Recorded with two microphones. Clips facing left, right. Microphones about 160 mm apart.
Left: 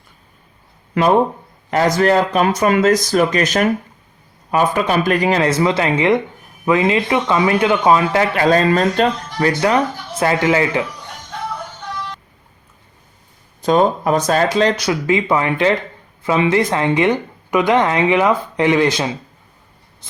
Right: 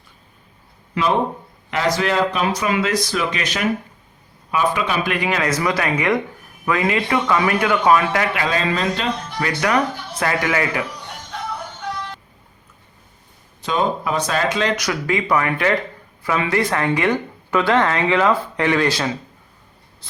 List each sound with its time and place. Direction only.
0.9 s speech: 50° left (ahead or behind); by 8.3 s 25° left (ahead or behind)
8.4 s speech: 40° left (ahead or behind)
9.6 s speech: 30° left (ahead or behind)
13.6 s speech: 45° left (ahead or behind); by 19.1 s 20° left (ahead or behind)